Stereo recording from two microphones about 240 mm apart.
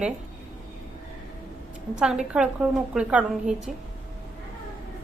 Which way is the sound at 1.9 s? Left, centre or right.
Centre.